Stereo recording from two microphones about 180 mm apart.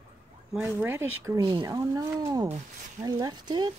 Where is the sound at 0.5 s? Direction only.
Centre (ahead or behind).